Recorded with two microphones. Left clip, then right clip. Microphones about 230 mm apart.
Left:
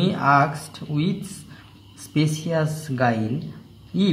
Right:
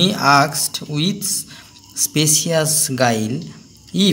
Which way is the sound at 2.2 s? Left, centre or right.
Right.